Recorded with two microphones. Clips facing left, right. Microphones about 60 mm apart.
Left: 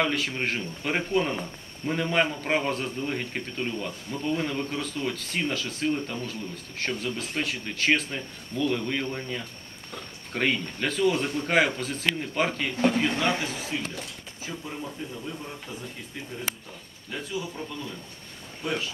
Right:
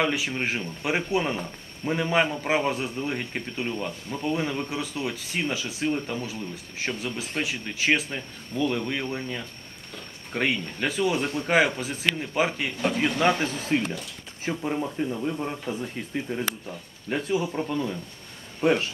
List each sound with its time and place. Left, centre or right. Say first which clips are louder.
0.0 s speech: right 1 dB; centre
13.2 s speech: right 4 dB; right
17.1 s speech: right 7 dB; right